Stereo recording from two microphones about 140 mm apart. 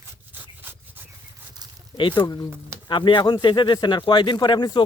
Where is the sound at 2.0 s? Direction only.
35° left (ahead or behind).